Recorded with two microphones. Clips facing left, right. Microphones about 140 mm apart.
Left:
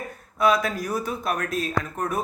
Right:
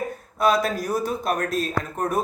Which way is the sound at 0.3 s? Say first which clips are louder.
Right 1 dB; 35° right (ahead or behind).